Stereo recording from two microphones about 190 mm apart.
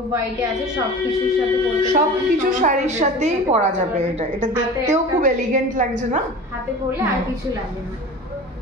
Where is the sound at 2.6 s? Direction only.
40° right (ahead or behind).